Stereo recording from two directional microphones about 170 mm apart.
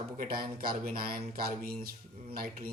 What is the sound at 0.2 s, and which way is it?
Speech, 55° right (ahead or behind).